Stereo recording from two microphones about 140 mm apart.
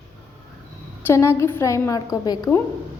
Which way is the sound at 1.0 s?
20° left (ahead or behind).